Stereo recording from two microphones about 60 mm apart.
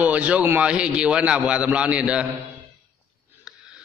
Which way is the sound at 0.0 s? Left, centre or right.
Right.